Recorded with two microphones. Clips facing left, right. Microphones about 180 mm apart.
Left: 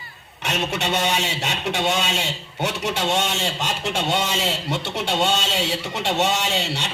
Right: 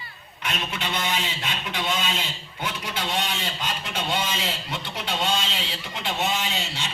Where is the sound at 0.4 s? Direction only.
75° left (ahead or behind).